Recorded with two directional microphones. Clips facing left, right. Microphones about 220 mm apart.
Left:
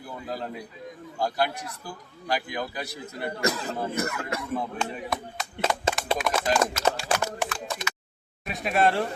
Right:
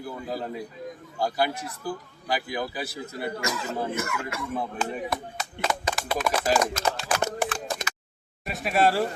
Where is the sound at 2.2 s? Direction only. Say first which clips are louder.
Even; 5° right (ahead or behind).